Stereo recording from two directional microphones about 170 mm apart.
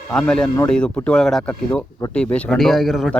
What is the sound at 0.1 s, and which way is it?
Speech, 5° left (ahead or behind).